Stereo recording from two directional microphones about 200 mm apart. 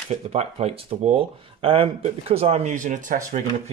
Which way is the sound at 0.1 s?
30° right (ahead or behind).